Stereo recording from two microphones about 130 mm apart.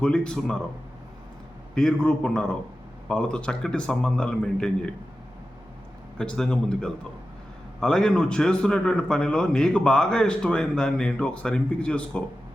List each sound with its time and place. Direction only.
0.0 s a man's voice: 5° left (ahead or behind)
1.7 s a man's voice: 5° left (ahead or behind)
6.1 s a man's voice: 5° left (ahead or behind)